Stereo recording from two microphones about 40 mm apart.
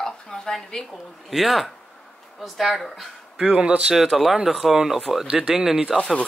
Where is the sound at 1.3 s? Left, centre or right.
Centre.